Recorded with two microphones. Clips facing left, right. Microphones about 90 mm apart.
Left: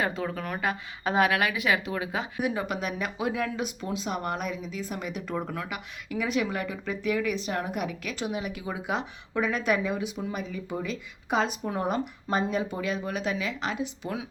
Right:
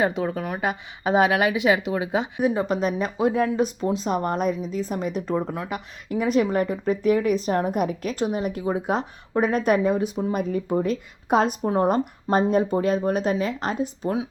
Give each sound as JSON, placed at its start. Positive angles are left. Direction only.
{"t": 0.0, "sound": "a woman's voice", "side_deg": -20}
{"t": 11.6, "sound": "a woman's voice", "side_deg": -35}